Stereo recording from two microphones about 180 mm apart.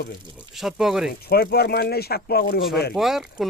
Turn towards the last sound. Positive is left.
turn(degrees=0)  # may be behind; listen again after turning